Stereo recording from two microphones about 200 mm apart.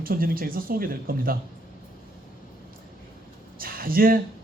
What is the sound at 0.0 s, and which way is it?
A man's voice, 45° right (ahead or behind).